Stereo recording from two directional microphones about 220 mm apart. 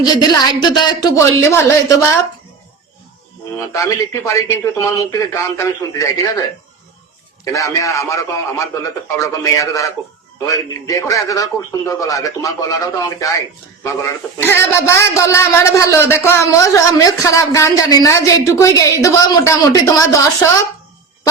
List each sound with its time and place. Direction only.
0.0 s a man's voice: 20° left (ahead or behind)
3.7 s a man's voice: 10° left (ahead or behind)
7.5 s a man's voice: 15° left (ahead or behind)